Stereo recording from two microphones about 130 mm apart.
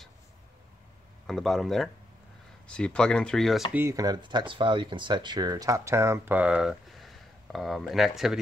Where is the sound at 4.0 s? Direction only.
35° right (ahead or behind).